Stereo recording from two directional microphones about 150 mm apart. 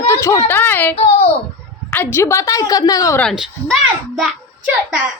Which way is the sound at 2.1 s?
20° left (ahead or behind).